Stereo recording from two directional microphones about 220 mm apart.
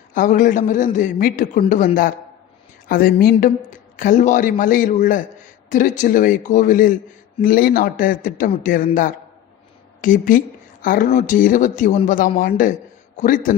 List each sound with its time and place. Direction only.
0.1 s speech: 35° left (ahead or behind)
2.9 s a woman's voice: 45° left (ahead or behind)